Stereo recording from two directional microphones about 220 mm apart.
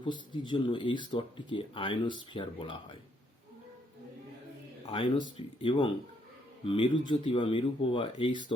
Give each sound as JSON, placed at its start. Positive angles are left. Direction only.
{"t": 0.0, "sound": "speech", "side_deg": 20}
{"t": 4.9, "sound": "speech", "side_deg": 25}